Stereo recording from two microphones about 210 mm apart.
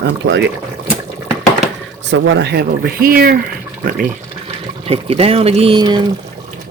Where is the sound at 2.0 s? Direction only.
60° right (ahead or behind); by 3.4 s 45° right (ahead or behind).